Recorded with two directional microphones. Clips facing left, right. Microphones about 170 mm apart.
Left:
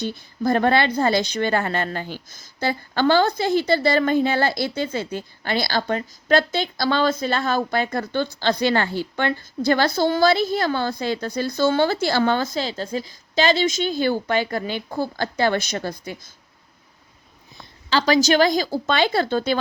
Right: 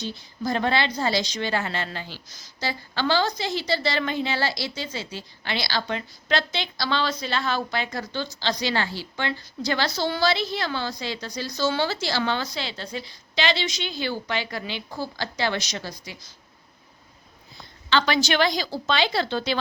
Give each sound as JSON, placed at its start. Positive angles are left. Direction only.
{"t": 0.0, "sound": "a woman's voice", "side_deg": 55}
{"t": 17.8, "sound": "a woman's voice", "side_deg": 35}